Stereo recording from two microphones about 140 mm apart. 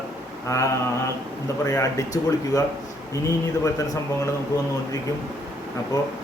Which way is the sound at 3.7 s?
25° left (ahead or behind).